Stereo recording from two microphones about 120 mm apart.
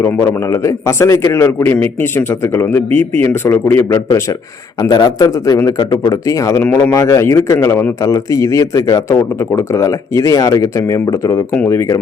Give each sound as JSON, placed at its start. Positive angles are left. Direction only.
{"t": 0.0, "sound": "a man's voice", "side_deg": 25}
{"t": 4.9, "sound": "a man's voice", "side_deg": 40}